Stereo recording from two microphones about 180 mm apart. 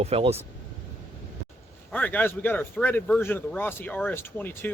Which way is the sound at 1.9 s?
10° left (ahead or behind).